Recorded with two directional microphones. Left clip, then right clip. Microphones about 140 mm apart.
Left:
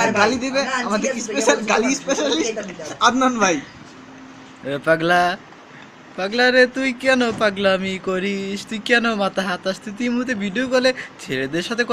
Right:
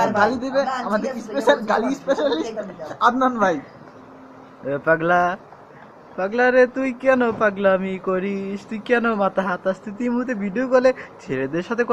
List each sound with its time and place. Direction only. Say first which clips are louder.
0.0 s a man's voice: left 1 dB; 10° right (ahead or behind)
4.6 s speech: left 1 dB; centre (ahead or behind)
6.1 s a man's voice: left 1 dB; 10° right (ahead or behind)